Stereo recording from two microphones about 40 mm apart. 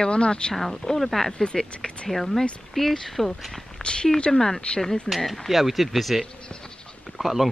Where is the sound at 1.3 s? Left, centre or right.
Centre.